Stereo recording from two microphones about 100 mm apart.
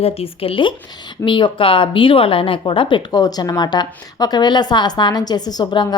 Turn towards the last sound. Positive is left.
turn(degrees=50)  # may be behind; listen again after turning